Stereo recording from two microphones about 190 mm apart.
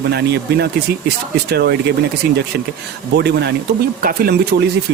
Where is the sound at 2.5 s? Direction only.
70° right (ahead or behind).